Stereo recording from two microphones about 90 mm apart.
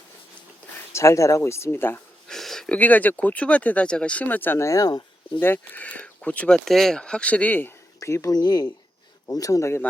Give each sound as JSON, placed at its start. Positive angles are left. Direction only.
{"t": 0.9, "sound": "speech", "side_deg": 35}
{"t": 2.3, "sound": "a sound", "side_deg": 5}
{"t": 2.7, "sound": "speech", "side_deg": 20}
{"t": 4.6, "sound": "speech", "side_deg": 40}
{"t": 5.4, "sound": "speech", "side_deg": 20}
{"t": 6.7, "sound": "speech", "side_deg": 5}
{"t": 7.9, "sound": "speech", "side_deg": 35}
{"t": 8.4, "sound": "speech", "side_deg": 50}